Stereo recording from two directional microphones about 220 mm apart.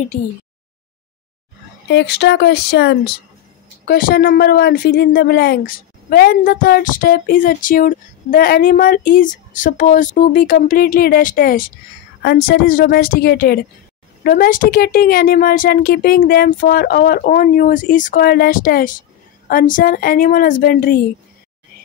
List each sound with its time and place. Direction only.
1.9 s a woman's voice: 50° left (ahead or behind)